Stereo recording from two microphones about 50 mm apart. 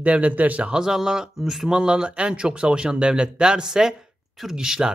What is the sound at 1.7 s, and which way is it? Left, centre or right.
Speech, centre.